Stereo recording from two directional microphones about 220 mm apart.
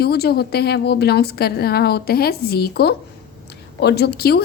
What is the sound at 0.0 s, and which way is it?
A woman's voice, 45° left (ahead or behind).